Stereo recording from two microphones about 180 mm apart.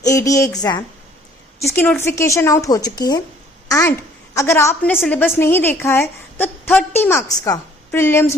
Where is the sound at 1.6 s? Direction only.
10° left (ahead or behind).